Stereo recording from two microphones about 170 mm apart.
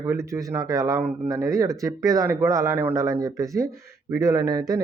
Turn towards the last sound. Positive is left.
turn(degrees=-20)  # may be behind; listen again after turning